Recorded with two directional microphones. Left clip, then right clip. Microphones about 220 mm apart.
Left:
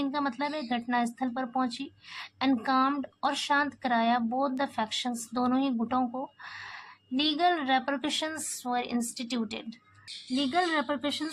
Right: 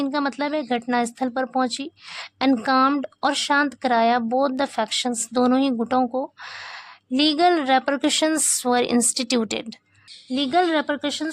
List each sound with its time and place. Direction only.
0.0 s speech: 45° right (ahead or behind)
10.3 s speech: 40° right (ahead or behind)